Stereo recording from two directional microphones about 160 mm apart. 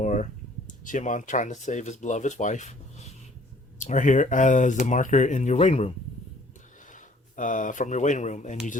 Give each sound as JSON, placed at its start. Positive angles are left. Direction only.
{"t": 0.0, "sound": "a sound", "side_deg": 50}
{"t": 0.9, "sound": "speech", "side_deg": 55}
{"t": 6.9, "sound": "speech", "side_deg": 55}